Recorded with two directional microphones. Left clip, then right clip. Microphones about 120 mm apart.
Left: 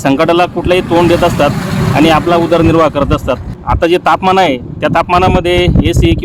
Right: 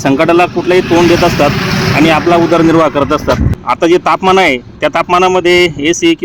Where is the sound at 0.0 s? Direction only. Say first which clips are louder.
Even; 20° left (ahead or behind).